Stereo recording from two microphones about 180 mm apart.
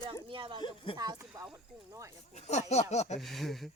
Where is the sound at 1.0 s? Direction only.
20° right (ahead or behind).